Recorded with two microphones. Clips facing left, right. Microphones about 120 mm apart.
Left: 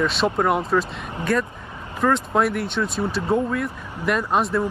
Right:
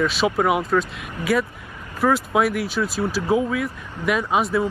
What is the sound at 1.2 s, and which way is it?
Speech, 25° left (ahead or behind).